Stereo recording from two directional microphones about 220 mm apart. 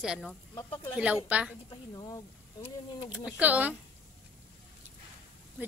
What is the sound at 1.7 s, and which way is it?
Speech, 20° left (ahead or behind).